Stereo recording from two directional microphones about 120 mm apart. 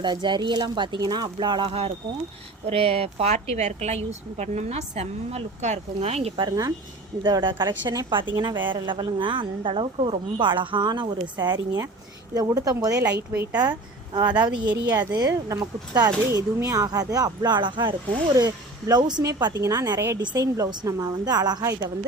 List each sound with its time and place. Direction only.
0.0 s a woman's voice: 40° right (ahead or behind); by 6.3 s 60° right (ahead or behind)
6.3 s a woman's voice: 40° right (ahead or behind); by 13.6 s 20° right (ahead or behind)
13.6 s speech: 35° right (ahead or behind)